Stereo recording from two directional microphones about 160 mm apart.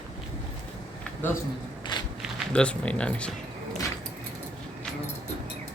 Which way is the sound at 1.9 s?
30° left (ahead or behind).